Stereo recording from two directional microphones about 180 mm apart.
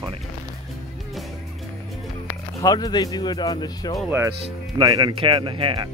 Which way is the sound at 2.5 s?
20° left (ahead or behind).